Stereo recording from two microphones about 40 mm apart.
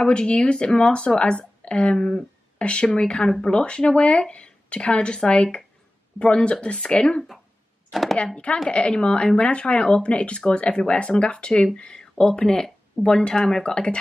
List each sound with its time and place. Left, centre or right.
0.0 s speech: left
2.6 s speech: left
7.9 s speech: centre
8.6 s speech: left